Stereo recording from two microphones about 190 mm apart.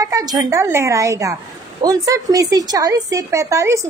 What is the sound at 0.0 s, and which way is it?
A woman's voice, 20° right (ahead or behind).